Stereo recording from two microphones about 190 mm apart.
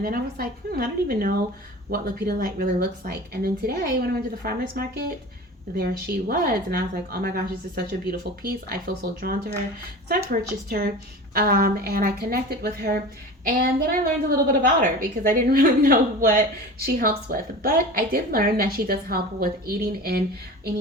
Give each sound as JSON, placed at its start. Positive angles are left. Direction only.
{"t": 0.0, "sound": "a woman's voice", "side_deg": -50}
{"t": 10.7, "sound": "a woman's voice", "side_deg": -55}